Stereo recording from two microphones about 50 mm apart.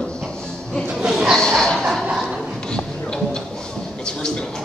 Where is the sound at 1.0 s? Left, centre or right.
Centre.